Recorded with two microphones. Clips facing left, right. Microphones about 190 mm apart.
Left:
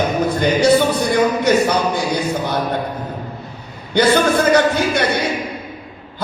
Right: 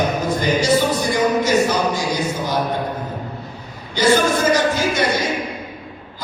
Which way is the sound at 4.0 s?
60° left (ahead or behind).